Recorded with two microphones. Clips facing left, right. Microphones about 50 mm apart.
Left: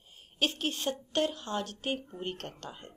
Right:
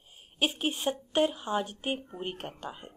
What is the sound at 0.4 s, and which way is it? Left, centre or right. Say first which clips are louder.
Speech: right 2 dB; centre.